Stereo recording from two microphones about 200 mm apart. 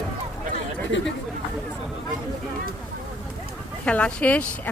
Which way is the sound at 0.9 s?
65° left (ahead or behind).